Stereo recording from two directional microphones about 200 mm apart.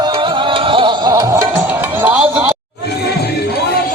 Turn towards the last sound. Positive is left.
turn(degrees=-10)  # may be behind; listen again after turning